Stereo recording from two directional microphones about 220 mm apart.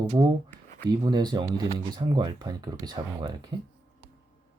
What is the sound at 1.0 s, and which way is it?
Speech, 20° right (ahead or behind).